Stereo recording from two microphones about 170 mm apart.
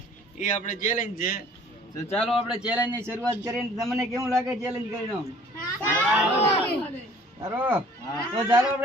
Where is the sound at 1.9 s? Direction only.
15° left (ahead or behind).